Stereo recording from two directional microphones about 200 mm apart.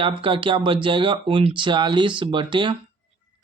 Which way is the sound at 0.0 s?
25° right (ahead or behind).